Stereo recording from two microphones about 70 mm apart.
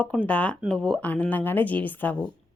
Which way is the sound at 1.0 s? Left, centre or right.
Left.